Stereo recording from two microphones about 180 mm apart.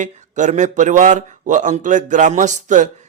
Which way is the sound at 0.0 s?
45° right (ahead or behind).